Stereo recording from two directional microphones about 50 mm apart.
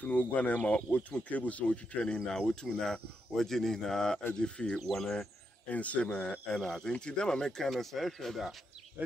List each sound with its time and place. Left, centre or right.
0.0 s speech: left
2.1 s speech: centre
4.3 s speech: centre
4.7 s speech: centre
5.7 s speech: left; by 8.5 s centre